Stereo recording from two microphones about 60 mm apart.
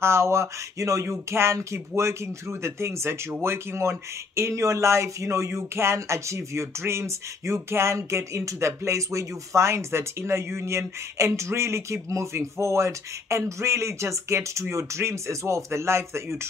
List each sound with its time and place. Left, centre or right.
0.0 s speech: right
1.0 s speech: right